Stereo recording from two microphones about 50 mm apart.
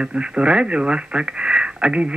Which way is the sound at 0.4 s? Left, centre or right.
Centre.